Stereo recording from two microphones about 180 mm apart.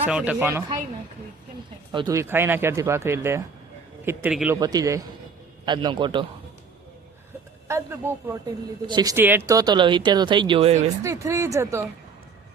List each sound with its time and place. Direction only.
0.0 s speech: 5° right (ahead or behind)
1.9 s speech: 25° right (ahead or behind); by 4.5 s 5° right (ahead or behind)
4.6 s speech: 20° right (ahead or behind)
7.7 s speech: 15° right (ahead or behind); by 10.9 s 35° right (ahead or behind)
11.0 s speech: 15° right (ahead or behind)